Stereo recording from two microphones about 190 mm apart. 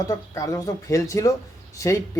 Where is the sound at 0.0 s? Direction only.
15° left (ahead or behind).